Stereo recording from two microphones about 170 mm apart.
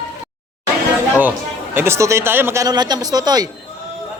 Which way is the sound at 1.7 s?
15° right (ahead or behind).